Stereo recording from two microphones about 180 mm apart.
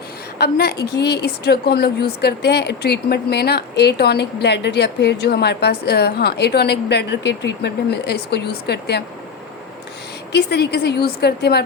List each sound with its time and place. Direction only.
0.3 s a woman's voice: 65° left (ahead or behind)
10.3 s a woman's voice: 65° left (ahead or behind)